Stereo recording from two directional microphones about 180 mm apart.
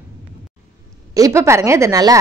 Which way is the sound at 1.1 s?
15° right (ahead or behind).